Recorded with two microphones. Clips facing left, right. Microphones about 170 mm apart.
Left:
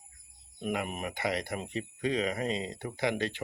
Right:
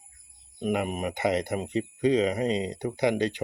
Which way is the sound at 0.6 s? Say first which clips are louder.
Right 6 dB; 20° right (ahead or behind).